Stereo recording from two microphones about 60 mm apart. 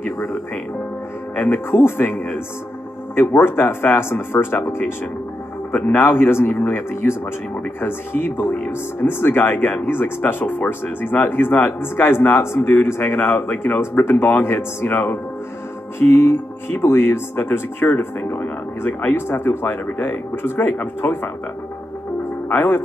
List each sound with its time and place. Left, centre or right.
1.3 s speech: left
6.0 s speech: left